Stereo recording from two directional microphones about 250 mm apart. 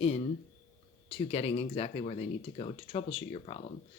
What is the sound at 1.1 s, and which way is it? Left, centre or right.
Speech, left.